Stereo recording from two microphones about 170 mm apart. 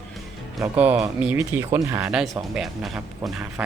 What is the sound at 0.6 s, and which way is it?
Speech, 10° right (ahead or behind).